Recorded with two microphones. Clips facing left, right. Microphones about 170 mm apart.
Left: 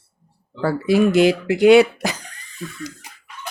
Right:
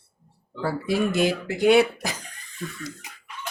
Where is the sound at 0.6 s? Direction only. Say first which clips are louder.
Left 7 dB; 80° left.